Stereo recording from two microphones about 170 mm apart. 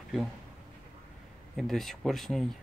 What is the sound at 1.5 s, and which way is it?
Speech, centre (ahead or behind).